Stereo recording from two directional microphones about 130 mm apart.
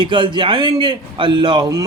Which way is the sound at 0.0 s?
35° right (ahead or behind).